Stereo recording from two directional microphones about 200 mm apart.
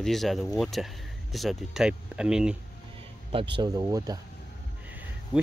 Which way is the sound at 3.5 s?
20° right (ahead or behind).